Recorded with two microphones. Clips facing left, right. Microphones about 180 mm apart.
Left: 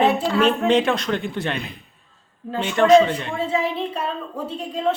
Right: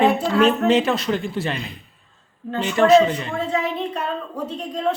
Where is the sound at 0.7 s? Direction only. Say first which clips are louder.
Even; centre (ahead or behind).